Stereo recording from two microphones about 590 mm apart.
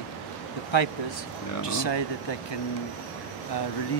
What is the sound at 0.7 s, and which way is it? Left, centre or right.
Speech, left.